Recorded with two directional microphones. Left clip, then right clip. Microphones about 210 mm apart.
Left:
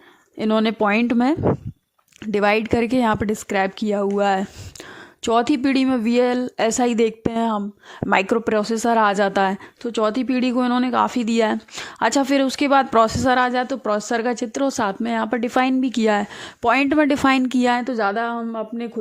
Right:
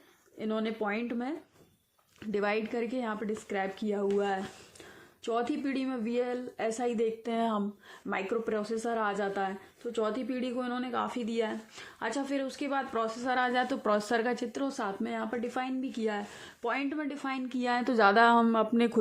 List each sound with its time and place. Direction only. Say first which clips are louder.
0.3 s speech: left 14 dB; 55° left (ahead or behind)
2.3 s a woman's voice: left 13 dB; 40° left (ahead or behind)
7.3 s speech: left 6 dB; 35° left (ahead or behind)
8.1 s a woman's voice: left 14 dB; 55° left (ahead or behind); by 17.8 s 35° left (ahead or behind)
17.8 s a woman's voice: left 1 dB; 15° left (ahead or behind)